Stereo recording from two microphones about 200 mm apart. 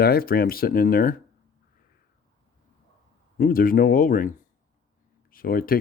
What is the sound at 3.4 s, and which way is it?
Speech, 45° left (ahead or behind).